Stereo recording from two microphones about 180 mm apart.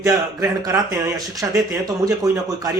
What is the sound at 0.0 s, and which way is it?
Speech, 20° right (ahead or behind).